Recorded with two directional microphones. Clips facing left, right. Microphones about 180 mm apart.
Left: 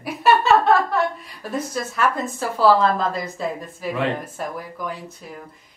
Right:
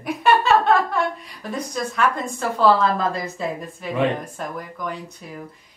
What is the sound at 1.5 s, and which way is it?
A woman's voice, 5° left (ahead or behind).